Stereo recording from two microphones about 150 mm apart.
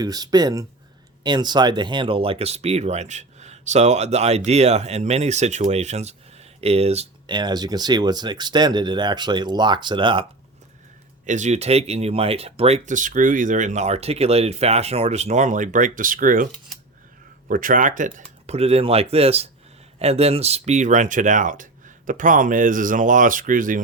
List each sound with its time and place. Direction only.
0.0 s speech: 25° right (ahead or behind); by 7.1 s 45° right (ahead or behind)
7.3 s speech: 30° right (ahead or behind)
11.3 s speech: 50° right (ahead or behind)
17.5 s speech: 65° right (ahead or behind)
18.4 s speech: 45° right (ahead or behind); by 23.8 s 65° right (ahead or behind)